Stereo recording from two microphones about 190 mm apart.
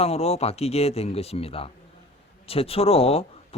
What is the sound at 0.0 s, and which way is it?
Speech, 30° left (ahead or behind).